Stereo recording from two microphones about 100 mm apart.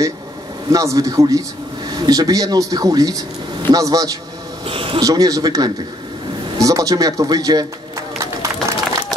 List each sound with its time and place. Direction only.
0.7 s speech: 35° right (ahead or behind)
4.6 s speech: 65° right (ahead or behind)
5.0 s speech: 40° right (ahead or behind)
8.2 s a sound: 30° right (ahead or behind)